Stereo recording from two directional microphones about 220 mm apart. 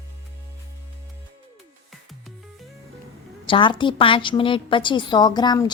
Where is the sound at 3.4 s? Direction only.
20° left (ahead or behind).